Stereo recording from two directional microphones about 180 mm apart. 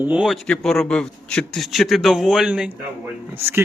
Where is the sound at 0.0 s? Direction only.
5° right (ahead or behind).